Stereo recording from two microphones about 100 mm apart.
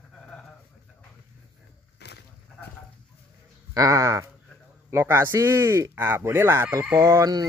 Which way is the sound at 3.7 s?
35° right (ahead or behind).